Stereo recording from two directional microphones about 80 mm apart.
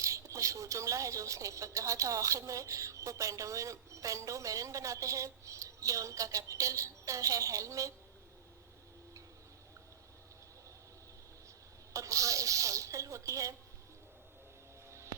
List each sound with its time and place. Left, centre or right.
0.0 s speech: right
11.9 s speech: right
14.8 s a sound: right